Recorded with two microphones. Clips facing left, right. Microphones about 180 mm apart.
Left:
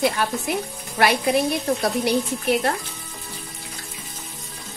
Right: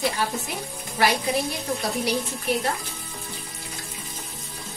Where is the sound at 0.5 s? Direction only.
65° left (ahead or behind).